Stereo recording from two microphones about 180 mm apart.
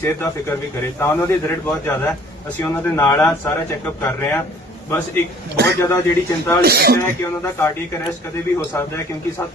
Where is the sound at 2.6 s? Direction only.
15° left (ahead or behind).